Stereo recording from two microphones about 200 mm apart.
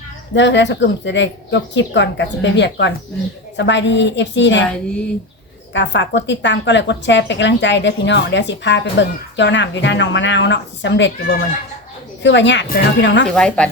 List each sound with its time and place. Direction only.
0.3 s a woman's voice: 65° left (ahead or behind)
5.7 s a woman's voice: 65° left (ahead or behind)
13.2 s speech: 5° left (ahead or behind)